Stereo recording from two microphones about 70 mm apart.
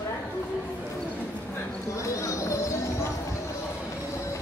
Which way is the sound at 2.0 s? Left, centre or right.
Left.